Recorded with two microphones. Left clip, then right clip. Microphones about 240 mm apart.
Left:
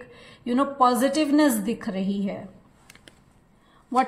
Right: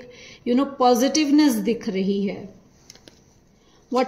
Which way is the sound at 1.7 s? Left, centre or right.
Centre.